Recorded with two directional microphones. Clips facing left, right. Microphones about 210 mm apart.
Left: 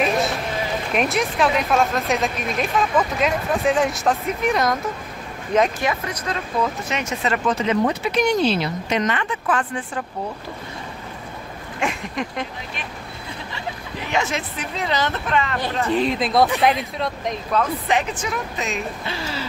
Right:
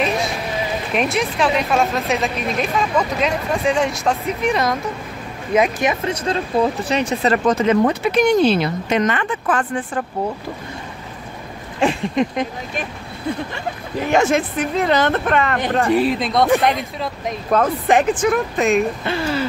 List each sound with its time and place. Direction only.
0.9 s a woman's voice: centre (ahead or behind)
5.9 s speech: 25° right (ahead or behind); by 10.0 s 50° right (ahead or behind)
11.8 s a sound: 30° right (ahead or behind)
13.5 s speech: 50° right (ahead or behind)
15.9 s a woman's voice: 5° right (ahead or behind)
17.5 s speech: 50° right (ahead or behind)